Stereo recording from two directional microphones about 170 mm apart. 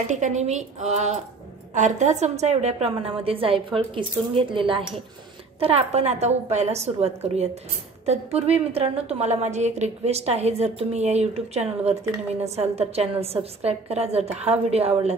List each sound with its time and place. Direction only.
0.1 s a woman's voice: 45° right (ahead or behind)